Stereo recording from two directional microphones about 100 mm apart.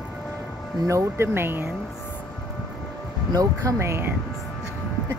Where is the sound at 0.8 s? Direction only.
30° right (ahead or behind).